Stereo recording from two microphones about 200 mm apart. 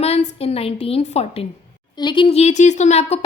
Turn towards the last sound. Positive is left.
turn(degrees=35)  # may be behind; listen again after turning